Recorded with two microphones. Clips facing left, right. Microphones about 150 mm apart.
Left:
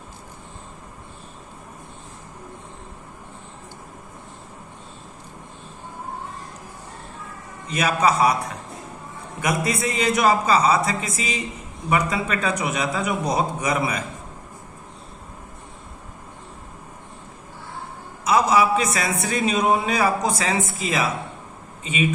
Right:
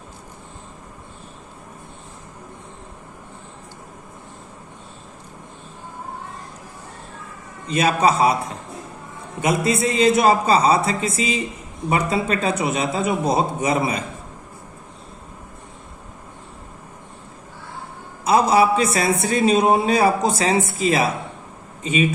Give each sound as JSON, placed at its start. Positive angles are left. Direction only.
{"t": 7.7, "sound": "a man's voice", "side_deg": -30}
{"t": 9.4, "sound": "a man's voice", "side_deg": -25}
{"t": 18.3, "sound": "a man's voice", "side_deg": -30}